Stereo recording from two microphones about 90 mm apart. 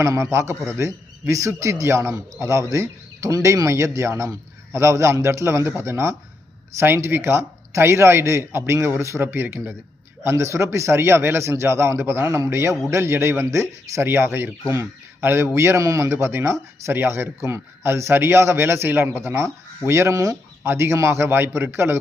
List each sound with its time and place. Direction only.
0.0 s a man's voice: 30° right (ahead or behind)